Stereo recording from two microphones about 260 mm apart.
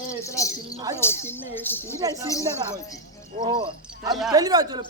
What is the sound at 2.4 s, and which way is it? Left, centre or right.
A man's voice, centre.